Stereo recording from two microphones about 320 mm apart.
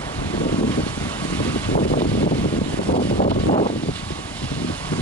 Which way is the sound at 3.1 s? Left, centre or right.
Left.